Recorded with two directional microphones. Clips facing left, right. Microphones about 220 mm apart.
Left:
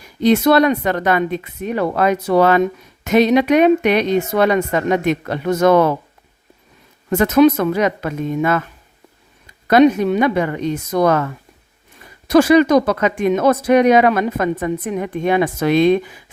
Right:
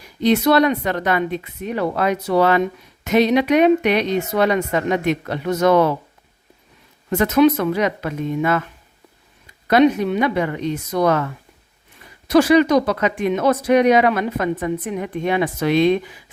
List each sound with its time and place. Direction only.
0.2 s speech: 50° left (ahead or behind)
7.1 s speech: 45° left (ahead or behind)
9.6 s speech: 45° left (ahead or behind)
12.3 s speech: 50° left (ahead or behind)